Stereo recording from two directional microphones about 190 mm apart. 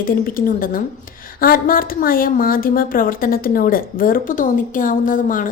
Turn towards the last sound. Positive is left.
turn(degrees=45)  # may be behind; listen again after turning